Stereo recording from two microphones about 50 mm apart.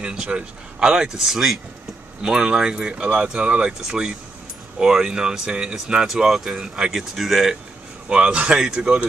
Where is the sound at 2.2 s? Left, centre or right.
Centre.